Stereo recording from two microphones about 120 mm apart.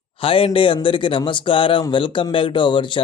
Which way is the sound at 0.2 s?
50° left (ahead or behind).